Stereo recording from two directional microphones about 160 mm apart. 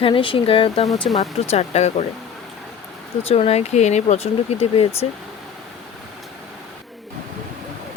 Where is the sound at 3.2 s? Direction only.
40° left (ahead or behind).